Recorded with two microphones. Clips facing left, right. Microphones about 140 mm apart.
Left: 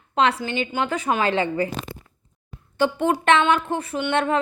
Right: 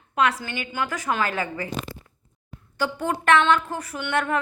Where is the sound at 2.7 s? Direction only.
25° left (ahead or behind).